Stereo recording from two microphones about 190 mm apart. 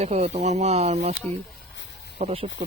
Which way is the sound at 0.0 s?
35° right (ahead or behind).